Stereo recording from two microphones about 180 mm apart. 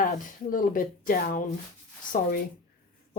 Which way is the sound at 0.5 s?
50° left (ahead or behind).